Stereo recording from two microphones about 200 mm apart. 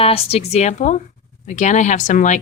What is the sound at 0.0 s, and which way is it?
A woman's voice, 30° left (ahead or behind).